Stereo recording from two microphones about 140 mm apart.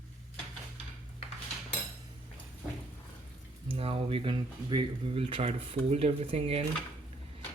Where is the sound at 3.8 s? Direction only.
40° right (ahead or behind).